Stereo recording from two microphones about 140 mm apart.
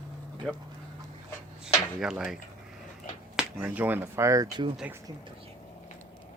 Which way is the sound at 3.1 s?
65° left (ahead or behind).